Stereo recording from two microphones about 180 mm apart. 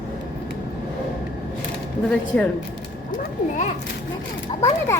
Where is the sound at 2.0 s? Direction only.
5° left (ahead or behind).